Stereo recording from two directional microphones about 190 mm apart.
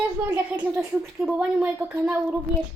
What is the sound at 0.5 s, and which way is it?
A woman's voice, 10° right (ahead or behind).